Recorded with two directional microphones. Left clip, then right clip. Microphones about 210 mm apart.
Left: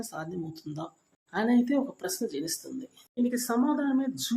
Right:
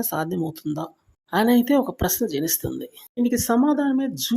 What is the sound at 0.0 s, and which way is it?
Speech, 45° right (ahead or behind).